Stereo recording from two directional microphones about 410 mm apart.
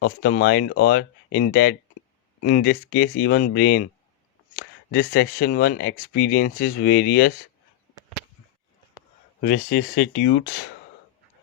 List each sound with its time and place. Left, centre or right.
0.0 s speech: left
9.4 s speech: left